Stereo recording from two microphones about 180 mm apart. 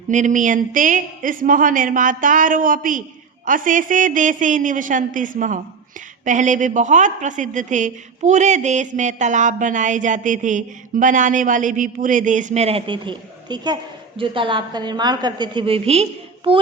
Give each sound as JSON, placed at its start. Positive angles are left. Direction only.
{"t": 0.1, "sound": "a woman's voice", "side_deg": -45}